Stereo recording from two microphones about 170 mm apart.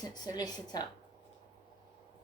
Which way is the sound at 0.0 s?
25° left (ahead or behind).